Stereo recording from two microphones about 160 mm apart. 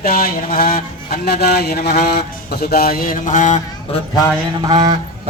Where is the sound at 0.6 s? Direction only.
70° left (ahead or behind); by 3.6 s 50° left (ahead or behind).